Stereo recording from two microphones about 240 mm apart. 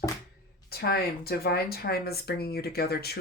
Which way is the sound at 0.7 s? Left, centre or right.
Left.